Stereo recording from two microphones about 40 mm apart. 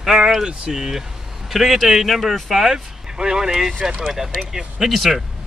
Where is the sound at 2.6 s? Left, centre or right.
Centre.